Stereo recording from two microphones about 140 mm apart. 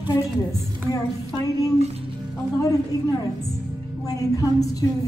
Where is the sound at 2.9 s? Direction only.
25° left (ahead or behind).